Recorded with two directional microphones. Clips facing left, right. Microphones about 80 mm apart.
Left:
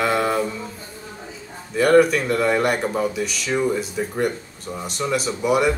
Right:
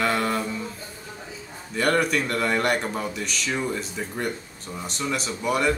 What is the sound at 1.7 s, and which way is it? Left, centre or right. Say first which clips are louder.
Speech: left 7 dB; centre.